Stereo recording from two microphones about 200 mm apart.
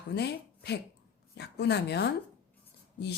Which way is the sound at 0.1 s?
55° left (ahead or behind).